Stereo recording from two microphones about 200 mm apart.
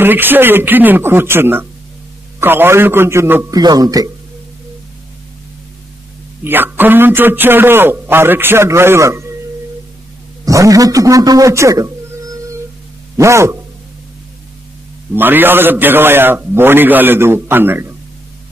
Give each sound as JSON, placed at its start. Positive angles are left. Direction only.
{"t": 0.0, "sound": "a man's voice", "side_deg": -10}
{"t": 6.4, "sound": "a man's voice", "side_deg": -10}
{"t": 10.4, "sound": "a man's voice", "side_deg": -15}
{"t": 15.1, "sound": "a man's voice", "side_deg": -10}